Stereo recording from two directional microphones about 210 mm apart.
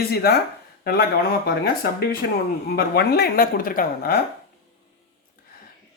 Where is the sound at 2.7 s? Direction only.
50° left (ahead or behind).